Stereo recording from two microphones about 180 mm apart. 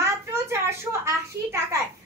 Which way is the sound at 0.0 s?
15° right (ahead or behind).